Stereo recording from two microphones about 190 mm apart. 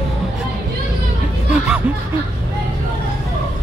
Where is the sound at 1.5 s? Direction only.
5° right (ahead or behind).